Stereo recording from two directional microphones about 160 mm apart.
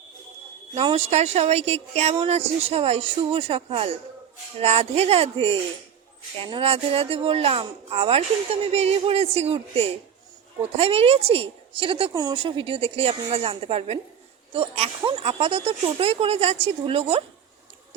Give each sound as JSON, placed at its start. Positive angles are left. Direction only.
{"t": 0.7, "sound": "speech", "side_deg": -40}